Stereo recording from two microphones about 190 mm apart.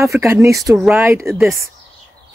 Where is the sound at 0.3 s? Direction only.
15° right (ahead or behind).